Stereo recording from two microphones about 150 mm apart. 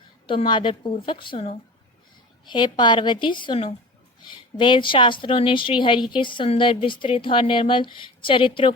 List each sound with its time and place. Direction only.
0.3 s a woman's voice: 35° left (ahead or behind)